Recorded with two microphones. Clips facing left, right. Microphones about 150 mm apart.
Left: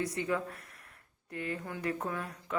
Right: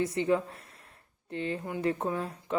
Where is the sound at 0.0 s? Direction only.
25° right (ahead or behind).